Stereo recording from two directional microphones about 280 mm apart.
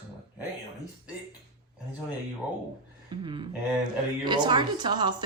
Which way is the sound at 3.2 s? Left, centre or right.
Centre.